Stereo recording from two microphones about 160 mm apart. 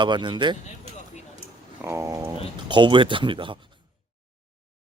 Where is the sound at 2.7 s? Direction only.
30° right (ahead or behind).